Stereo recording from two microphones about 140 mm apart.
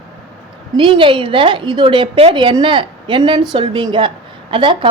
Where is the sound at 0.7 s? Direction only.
40° right (ahead or behind).